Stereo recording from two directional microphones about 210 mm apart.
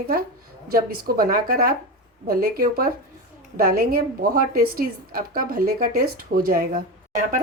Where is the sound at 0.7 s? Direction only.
45° right (ahead or behind).